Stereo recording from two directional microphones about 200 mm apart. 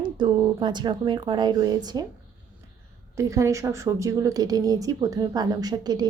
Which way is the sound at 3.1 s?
15° right (ahead or behind).